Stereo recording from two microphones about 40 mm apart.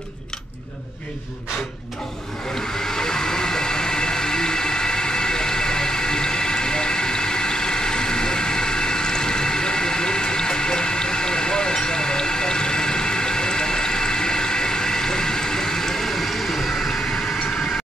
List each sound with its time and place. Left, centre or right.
2.9 s vehicle: centre